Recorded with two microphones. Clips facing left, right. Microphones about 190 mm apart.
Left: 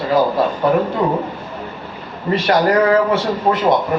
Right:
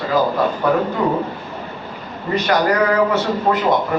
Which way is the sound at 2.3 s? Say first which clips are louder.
Left 2 dB; 25° left (ahead or behind).